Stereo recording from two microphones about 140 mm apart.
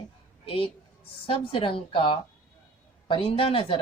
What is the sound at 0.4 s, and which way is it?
A woman's voice, 40° left (ahead or behind).